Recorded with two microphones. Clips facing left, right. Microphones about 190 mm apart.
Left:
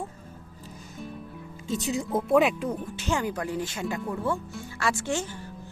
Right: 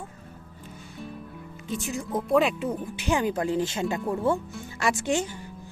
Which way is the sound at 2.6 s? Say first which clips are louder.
Right 2 dB; 10° right (ahead or behind).